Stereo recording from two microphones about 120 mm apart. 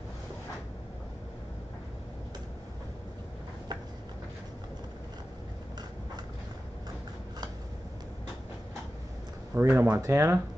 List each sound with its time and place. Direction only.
9.5 s speech: 20° right (ahead or behind)